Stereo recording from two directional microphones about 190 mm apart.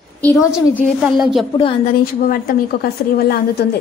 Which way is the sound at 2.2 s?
50° left (ahead or behind).